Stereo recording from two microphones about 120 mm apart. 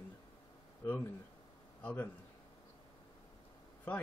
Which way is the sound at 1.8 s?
10° left (ahead or behind).